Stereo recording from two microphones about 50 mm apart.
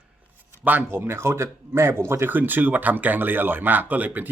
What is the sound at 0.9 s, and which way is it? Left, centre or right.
Speech, right.